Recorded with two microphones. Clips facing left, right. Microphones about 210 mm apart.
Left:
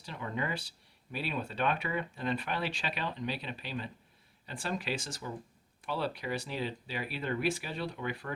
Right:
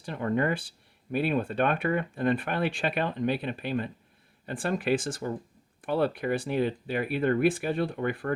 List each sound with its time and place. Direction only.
0.0 s speech: 55° right (ahead or behind)